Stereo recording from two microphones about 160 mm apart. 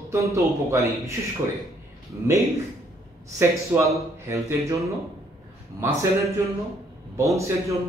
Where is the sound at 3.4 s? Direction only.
20° right (ahead or behind).